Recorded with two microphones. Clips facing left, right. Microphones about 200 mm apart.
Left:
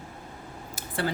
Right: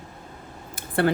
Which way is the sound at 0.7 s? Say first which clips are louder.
Right 8 dB; 60° right (ahead or behind).